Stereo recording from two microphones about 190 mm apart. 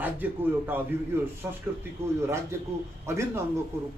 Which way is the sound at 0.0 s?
10° right (ahead or behind).